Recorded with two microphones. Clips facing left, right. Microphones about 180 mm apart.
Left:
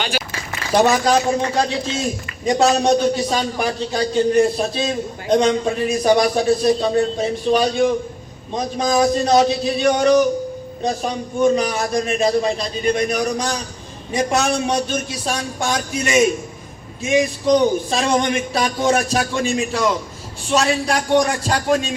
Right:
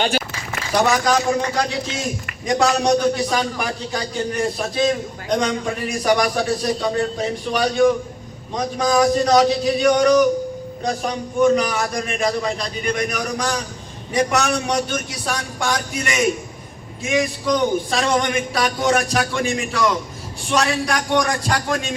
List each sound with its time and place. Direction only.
0.8 s a man's voice: 25° left (ahead or behind)
11.3 s a man's voice: 25° left (ahead or behind)